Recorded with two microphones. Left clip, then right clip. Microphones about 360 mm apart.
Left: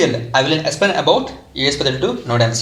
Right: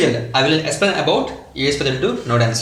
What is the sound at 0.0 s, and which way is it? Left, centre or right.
Speech, centre.